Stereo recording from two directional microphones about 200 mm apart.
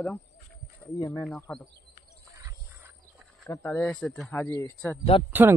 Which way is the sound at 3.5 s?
10° left (ahead or behind).